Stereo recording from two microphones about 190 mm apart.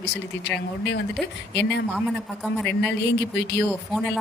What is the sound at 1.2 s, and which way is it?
A woman's voice, centre (ahead or behind).